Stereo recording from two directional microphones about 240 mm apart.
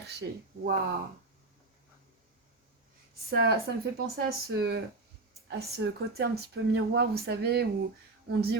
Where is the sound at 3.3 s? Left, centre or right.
Right.